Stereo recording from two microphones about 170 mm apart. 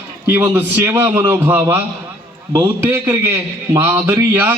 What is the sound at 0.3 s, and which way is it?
A man's voice, 15° right (ahead or behind).